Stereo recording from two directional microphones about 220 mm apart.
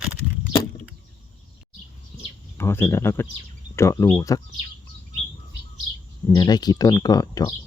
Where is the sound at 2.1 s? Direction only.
5° left (ahead or behind).